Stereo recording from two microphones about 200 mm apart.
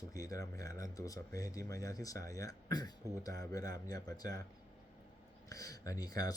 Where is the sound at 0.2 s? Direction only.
15° left (ahead or behind).